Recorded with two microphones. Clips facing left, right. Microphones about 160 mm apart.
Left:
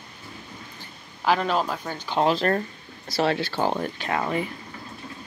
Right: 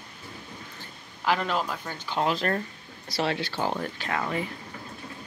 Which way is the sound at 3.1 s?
45° left (ahead or behind).